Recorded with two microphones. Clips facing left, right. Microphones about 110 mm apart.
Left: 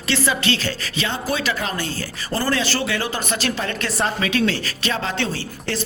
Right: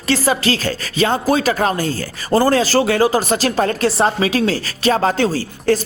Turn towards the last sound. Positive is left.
turn(degrees=-40)  # may be behind; listen again after turning